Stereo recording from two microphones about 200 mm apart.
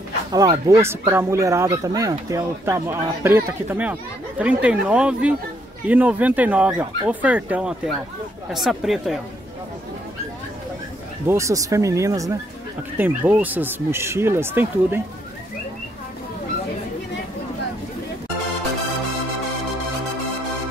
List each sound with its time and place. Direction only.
0.3 s speech: 20° right (ahead or behind); by 9.2 s centre (ahead or behind)
11.2 s speech: 15° right (ahead or behind)